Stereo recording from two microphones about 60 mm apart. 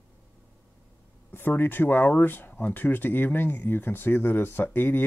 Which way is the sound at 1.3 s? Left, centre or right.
Left.